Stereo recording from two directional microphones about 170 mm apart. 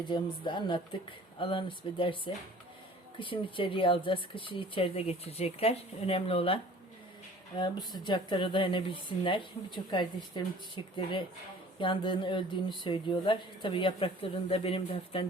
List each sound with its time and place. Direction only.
0.1 s speech: 30° left (ahead or behind)
7.6 s speech: 25° left (ahead or behind)